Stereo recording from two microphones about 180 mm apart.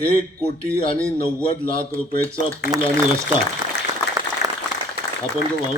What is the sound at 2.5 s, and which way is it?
Speech, 15° right (ahead or behind).